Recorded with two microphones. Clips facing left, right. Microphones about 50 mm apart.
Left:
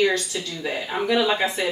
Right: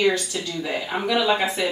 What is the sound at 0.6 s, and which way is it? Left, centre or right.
Speech, centre.